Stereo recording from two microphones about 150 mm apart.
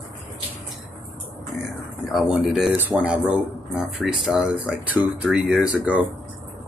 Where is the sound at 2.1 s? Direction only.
5° right (ahead or behind).